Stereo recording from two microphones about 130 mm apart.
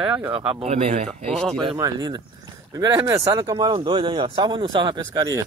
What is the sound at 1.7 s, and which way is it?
Speech, 30° right (ahead or behind).